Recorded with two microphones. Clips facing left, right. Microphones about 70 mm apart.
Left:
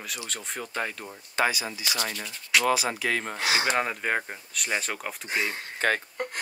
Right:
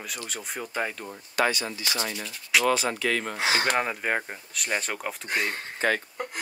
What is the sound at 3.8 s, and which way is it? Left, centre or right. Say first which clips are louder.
Speech: even; centre.